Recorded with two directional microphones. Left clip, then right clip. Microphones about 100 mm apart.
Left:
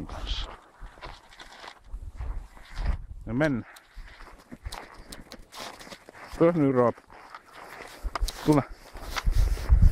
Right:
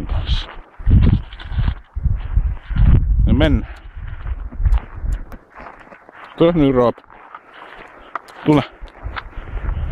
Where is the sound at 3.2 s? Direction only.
20° right (ahead or behind).